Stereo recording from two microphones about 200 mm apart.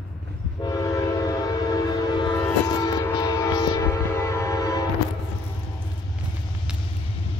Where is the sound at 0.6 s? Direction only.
20° left (ahead or behind).